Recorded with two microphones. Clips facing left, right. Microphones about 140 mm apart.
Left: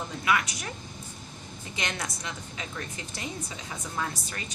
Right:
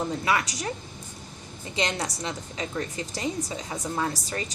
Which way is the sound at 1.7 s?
30° right (ahead or behind).